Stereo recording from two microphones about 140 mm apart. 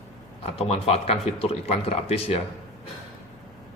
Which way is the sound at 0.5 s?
45° left (ahead or behind).